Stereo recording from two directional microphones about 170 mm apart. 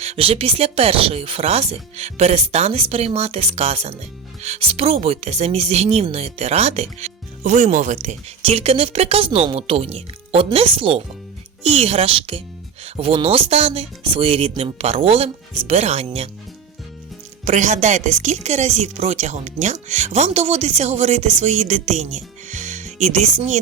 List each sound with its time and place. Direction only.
0.0 s speech: 35° right (ahead or behind)
17.4 s speech: 45° right (ahead or behind)